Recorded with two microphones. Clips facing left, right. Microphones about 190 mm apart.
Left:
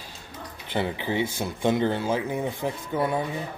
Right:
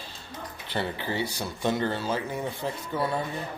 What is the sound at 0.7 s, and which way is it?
Speech, 15° left (ahead or behind).